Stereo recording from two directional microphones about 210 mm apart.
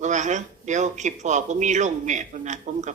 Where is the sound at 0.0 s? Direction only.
35° right (ahead or behind).